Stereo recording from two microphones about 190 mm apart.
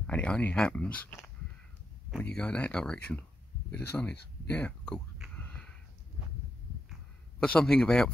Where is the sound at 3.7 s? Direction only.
10° left (ahead or behind).